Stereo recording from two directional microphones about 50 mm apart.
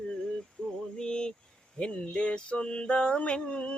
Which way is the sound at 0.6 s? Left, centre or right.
Centre.